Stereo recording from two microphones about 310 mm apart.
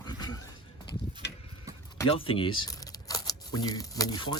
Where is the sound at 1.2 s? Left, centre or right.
Left.